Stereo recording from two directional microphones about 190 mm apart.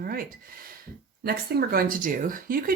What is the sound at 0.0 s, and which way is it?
Speech, 50° right (ahead or behind).